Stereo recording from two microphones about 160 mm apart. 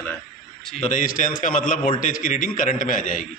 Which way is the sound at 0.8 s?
55° left (ahead or behind).